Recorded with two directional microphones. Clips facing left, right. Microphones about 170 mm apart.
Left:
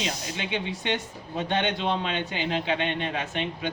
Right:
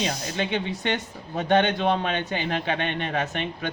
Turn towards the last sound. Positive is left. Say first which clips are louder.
# right 2 dB
turn(degrees=-50)  # may be behind; listen again after turning